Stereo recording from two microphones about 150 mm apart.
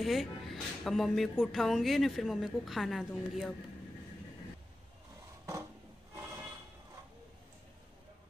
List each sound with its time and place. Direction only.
0.0 s speech: centre (ahead or behind)